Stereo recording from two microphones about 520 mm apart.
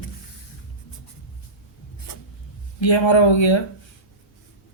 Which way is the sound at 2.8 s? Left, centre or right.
Left.